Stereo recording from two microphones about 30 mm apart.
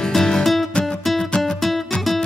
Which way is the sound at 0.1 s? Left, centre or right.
Centre.